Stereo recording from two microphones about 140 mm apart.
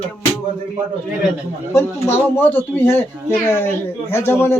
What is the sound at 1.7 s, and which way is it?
A man's voice, 20° left (ahead or behind).